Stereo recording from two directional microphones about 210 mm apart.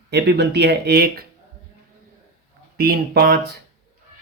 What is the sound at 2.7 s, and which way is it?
Speech, 50° right (ahead or behind).